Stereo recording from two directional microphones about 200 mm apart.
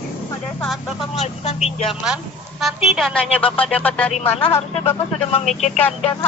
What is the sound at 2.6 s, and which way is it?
Speech, centre (ahead or behind).